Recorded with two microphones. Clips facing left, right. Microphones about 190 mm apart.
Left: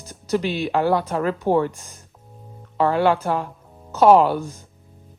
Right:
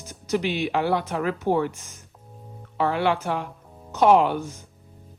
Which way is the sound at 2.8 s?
35° left (ahead or behind).